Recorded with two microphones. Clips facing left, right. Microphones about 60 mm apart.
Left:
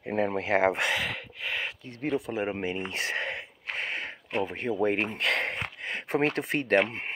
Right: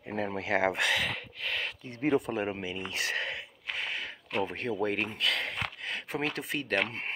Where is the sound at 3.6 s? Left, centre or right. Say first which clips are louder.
Left 2 dB; left.